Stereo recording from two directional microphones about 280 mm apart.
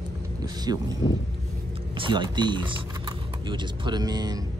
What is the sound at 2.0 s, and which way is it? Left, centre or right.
Speech, centre.